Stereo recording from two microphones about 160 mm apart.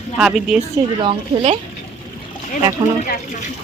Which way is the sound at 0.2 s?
5° right (ahead or behind).